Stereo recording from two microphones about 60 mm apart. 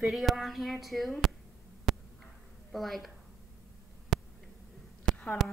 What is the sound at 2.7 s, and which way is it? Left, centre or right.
Speech, centre.